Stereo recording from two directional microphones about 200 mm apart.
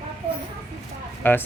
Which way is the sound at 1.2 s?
10° left (ahead or behind).